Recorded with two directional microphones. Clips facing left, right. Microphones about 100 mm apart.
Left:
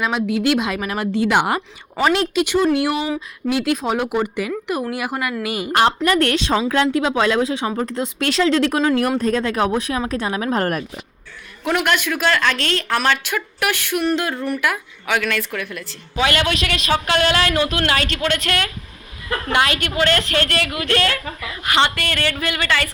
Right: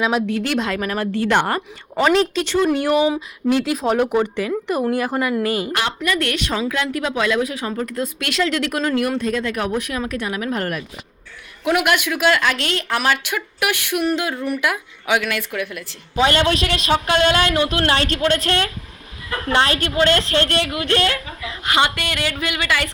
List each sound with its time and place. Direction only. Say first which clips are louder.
0.0 s speech: even; 5° right (ahead or behind)
2.0 s speech: right 1 dB; centre (ahead or behind)
2.4 s speech: left 1 dB; 10° left (ahead or behind)
5.7 s a woman's voice: left 6 dB; 35° left (ahead or behind)
9.0 s a woman's voice: left 2 dB; 40° left (ahead or behind)
9.4 s a woman's voice: left 3 dB; 30° left (ahead or behind)
11.6 s speech: right 1 dB; 10° right (ahead or behind)
16.1 s a man's voice: right 2 dB; 25° right (ahead or behind)